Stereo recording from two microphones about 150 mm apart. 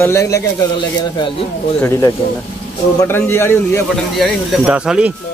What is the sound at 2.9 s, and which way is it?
Speech, 15° left (ahead or behind).